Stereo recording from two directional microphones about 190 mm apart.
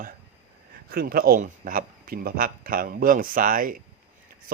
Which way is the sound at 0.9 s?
50° right (ahead or behind).